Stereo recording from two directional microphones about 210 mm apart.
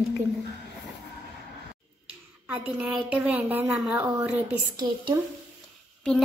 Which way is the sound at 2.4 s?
5° right (ahead or behind).